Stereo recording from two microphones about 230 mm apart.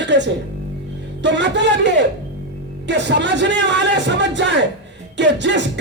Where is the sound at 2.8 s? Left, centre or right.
Right.